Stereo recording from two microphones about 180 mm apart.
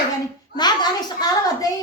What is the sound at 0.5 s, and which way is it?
A woman's voice, 25° left (ahead or behind).